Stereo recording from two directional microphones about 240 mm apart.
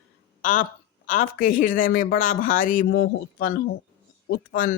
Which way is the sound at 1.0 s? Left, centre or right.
Left.